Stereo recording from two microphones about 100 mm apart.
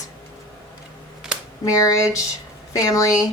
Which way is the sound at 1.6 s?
35° left (ahead or behind).